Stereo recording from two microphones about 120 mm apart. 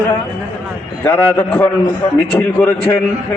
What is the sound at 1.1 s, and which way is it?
A man's voice, 15° left (ahead or behind).